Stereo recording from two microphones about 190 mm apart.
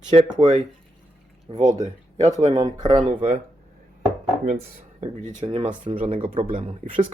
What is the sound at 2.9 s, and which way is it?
Speech, 40° right (ahead or behind).